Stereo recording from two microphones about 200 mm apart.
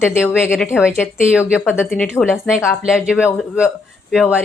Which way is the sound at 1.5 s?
5° right (ahead or behind).